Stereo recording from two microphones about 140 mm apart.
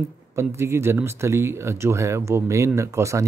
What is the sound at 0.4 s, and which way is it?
Speech, 20° right (ahead or behind).